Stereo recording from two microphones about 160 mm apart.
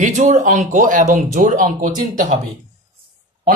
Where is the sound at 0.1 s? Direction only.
50° right (ahead or behind).